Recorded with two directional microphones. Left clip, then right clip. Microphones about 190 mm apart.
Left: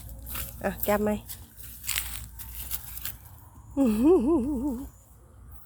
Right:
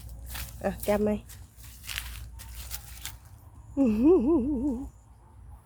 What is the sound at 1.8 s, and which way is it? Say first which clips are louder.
Crushing: left 4 dB; 65° left (ahead or behind).